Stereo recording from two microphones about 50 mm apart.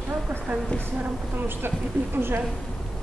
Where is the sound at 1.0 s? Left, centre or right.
Right.